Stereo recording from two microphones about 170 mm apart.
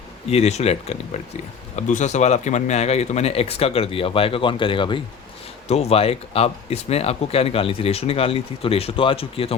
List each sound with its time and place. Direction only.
0.3 s speech: 40° left (ahead or behind)